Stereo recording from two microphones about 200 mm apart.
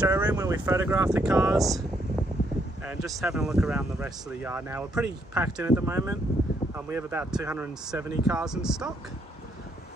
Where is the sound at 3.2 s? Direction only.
Centre (ahead or behind).